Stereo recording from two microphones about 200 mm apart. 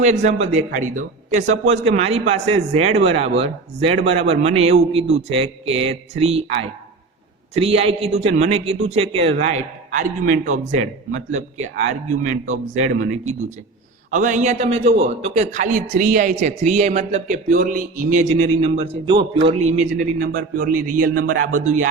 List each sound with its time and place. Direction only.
0.0 s a man's voice: 35° right (ahead or behind)
14.1 s a man's voice: 40° right (ahead or behind)